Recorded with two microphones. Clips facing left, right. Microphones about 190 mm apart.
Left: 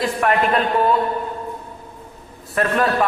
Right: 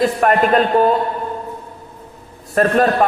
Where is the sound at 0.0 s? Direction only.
45° right (ahead or behind).